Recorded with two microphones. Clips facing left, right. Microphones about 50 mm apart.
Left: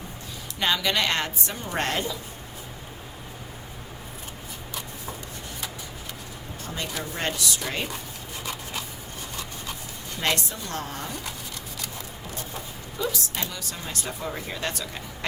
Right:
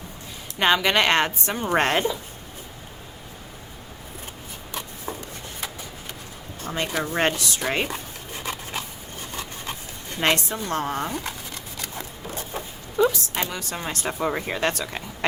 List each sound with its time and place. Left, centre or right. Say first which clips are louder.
0.6 s a woman's voice: right 5 dB; right
6.7 s speech: right 8 dB; right
10.2 s a woman's voice: right 5 dB; right
13.0 s a woman's voice: right 8 dB; right
14.2 s speech: right 9 dB; right